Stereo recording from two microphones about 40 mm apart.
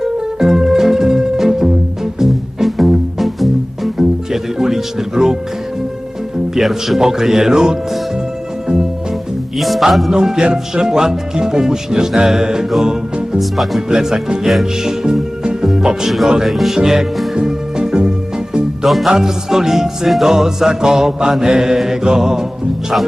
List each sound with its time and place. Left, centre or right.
0.0 s music: centre
3.9 s music: centre
6.6 s speech: centre
8.6 s music: centre
9.6 s speech: centre
10.1 s speech: centre
13.4 s speech: centre
13.9 s speech: centre
14.5 s music: centre
16.0 s speech: centre
16.7 s speech: centre
17.3 s music: centre
18.8 s music: centre
19.1 s speech: centre